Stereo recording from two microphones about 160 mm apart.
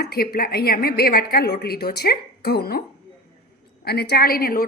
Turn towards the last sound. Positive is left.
turn(degrees=65)  # may be behind; listen again after turning